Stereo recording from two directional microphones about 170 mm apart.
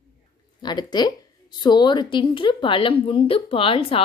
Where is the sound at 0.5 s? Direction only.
25° left (ahead or behind).